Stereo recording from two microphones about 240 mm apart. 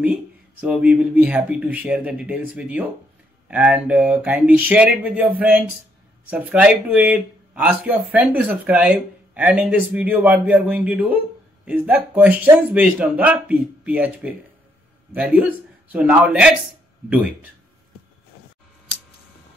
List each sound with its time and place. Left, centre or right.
0.0 s speech: centre